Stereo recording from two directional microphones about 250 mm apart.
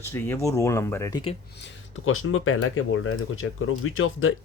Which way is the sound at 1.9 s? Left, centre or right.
Left.